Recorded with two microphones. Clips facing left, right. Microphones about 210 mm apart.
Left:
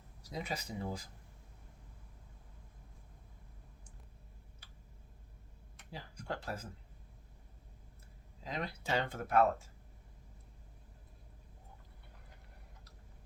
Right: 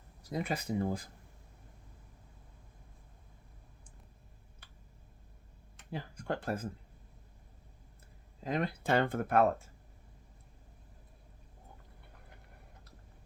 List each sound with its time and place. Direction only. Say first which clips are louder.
0.2 s speech: right 6 dB; 55° right (ahead or behind)
4.6 s tick-tock: right 1 dB; 55° right (ahead or behind)
5.9 s speech: right 6 dB; 55° right (ahead or behind)
8.4 s speech: right 7 dB; 50° right (ahead or behind)